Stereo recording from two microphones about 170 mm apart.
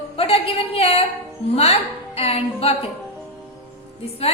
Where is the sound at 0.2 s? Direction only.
35° left (ahead or behind).